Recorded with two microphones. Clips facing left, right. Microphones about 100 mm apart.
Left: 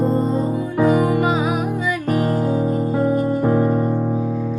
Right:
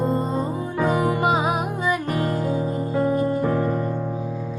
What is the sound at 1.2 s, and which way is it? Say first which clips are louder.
Music: left 1 dB; 25° right (ahead or behind).